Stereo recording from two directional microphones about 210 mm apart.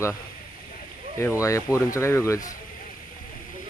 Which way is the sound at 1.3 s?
15° left (ahead or behind).